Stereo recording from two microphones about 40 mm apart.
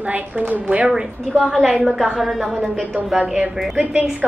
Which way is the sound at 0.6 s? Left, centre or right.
Right.